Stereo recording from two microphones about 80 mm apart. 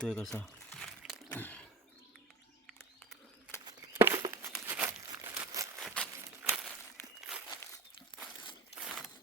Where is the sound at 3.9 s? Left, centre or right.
Right.